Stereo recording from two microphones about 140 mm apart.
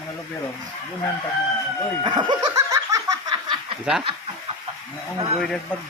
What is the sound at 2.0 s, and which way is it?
Laughter, 35° right (ahead or behind).